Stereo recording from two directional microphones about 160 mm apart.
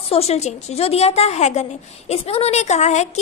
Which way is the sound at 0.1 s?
40° left (ahead or behind).